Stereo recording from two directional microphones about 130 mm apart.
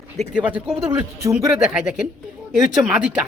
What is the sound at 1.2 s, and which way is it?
Speech, 25° right (ahead or behind).